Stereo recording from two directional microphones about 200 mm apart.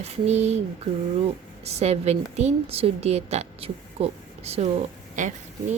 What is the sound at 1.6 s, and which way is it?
A woman's voice, 35° right (ahead or behind).